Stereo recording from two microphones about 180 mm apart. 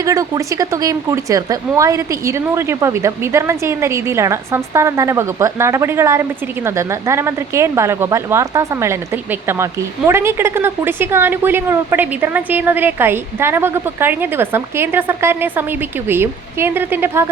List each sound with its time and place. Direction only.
0.0 s a woman's voice: 15° right (ahead or behind)